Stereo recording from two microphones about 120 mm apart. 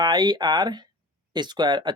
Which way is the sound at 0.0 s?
35° right (ahead or behind).